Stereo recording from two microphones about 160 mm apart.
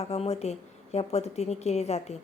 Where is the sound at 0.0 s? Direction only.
40° left (ahead or behind).